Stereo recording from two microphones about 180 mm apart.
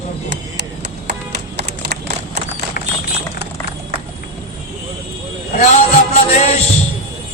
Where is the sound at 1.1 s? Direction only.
65° right (ahead or behind).